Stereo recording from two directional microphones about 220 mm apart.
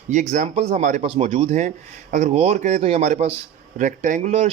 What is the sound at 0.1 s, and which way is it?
Speech, 35° right (ahead or behind).